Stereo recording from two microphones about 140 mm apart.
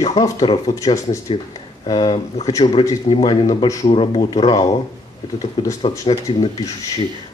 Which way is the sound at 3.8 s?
40° left (ahead or behind).